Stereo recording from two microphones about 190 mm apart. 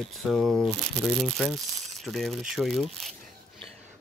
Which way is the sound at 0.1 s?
Centre (ahead or behind).